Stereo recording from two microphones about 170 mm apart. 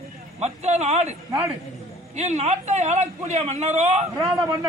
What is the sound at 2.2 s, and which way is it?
Speech, 40° right (ahead or behind).